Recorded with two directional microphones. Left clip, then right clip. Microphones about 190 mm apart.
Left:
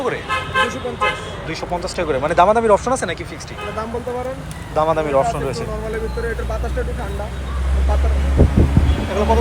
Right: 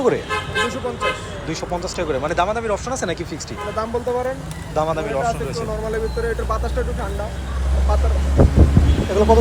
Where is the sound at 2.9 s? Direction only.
20° right (ahead or behind).